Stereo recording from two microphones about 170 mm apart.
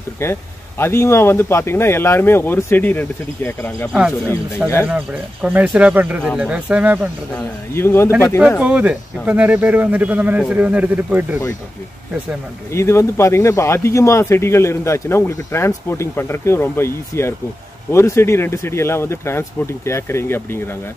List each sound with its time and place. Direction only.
0.2 s speech: 15° left (ahead or behind)
4.8 s speech: 10° right (ahead or behind)
7.3 s speech: 15° left (ahead or behind)
8.4 s speech: 5° right (ahead or behind)
12.7 s speech: 15° left (ahead or behind)